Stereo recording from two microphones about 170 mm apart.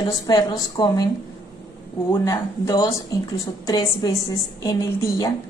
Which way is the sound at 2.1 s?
15° left (ahead or behind).